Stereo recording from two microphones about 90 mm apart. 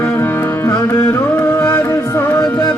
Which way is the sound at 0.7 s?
35° left (ahead or behind).